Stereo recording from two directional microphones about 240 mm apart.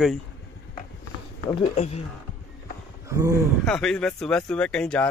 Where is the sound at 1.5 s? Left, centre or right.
Left.